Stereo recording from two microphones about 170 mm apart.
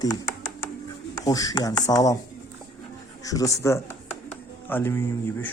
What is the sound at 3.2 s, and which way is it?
Speech, 20° left (ahead or behind).